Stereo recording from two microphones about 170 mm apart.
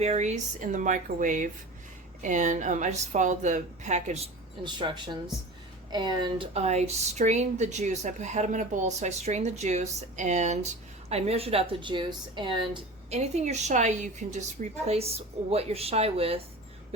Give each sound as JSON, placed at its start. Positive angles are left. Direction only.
{"t": 0.0, "sound": "speech", "side_deg": -40}
{"t": 4.6, "sound": "speech", "side_deg": -25}
{"t": 6.5, "sound": "speech", "side_deg": -40}